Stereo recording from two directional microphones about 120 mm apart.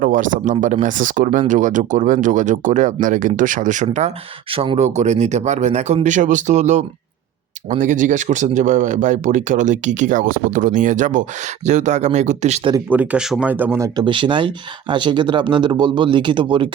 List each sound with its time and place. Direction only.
0.2 s speech: 90° right
4.5 s speech: 55° right (ahead or behind); by 6.8 s 75° right (ahead or behind)
7.7 s speech: 90° right; by 12.6 s 70° right (ahead or behind)
12.9 s speech: 10° right (ahead or behind)
13.5 s speech: 15° right (ahead or behind)
13.7 s speech: 30° right (ahead or behind)
14.0 s speech: 45° right (ahead or behind)